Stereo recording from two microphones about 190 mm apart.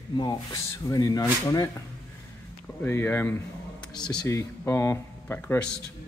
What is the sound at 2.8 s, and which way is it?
Speech, 10° left (ahead or behind).